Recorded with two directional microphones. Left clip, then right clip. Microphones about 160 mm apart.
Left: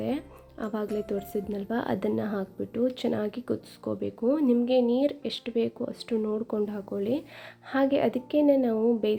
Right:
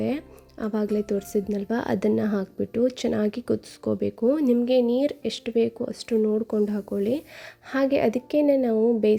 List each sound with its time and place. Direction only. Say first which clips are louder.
0.0 s a woman's voice: right 3 dB; 45° right (ahead or behind)